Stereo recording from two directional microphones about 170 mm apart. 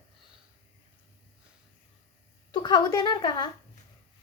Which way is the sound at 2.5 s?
25° left (ahead or behind).